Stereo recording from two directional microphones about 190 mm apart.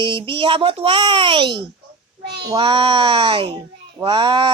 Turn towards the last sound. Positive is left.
turn(degrees=-25)  # may be behind; listen again after turning